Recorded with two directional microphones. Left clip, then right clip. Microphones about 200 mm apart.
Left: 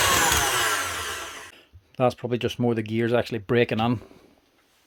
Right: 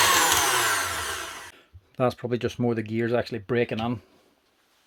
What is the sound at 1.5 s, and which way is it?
Speech, 5° left (ahead or behind).